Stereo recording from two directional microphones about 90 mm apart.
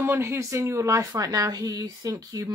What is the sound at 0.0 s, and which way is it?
Speech, 25° right (ahead or behind).